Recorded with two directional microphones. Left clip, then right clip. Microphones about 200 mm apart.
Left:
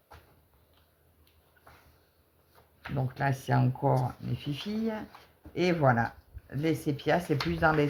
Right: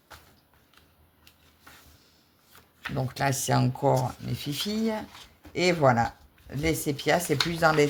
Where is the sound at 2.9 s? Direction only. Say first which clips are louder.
Right 4 dB; 45° right (ahead or behind).